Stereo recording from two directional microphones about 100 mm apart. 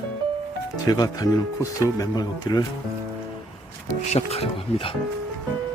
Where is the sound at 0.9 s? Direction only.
40° left (ahead or behind).